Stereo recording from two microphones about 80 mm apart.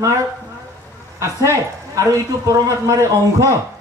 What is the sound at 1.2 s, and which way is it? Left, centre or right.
A man's voice, right.